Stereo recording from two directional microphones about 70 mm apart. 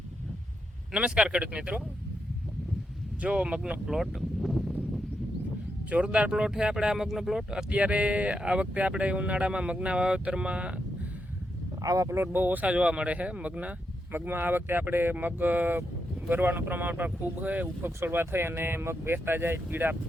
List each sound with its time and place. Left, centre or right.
0.9 s speech: centre
3.2 s speech: centre
3.8 s speech: centre
5.9 s speech: centre
7.7 s speech: centre
11.8 s speech: right
14.1 s speech: right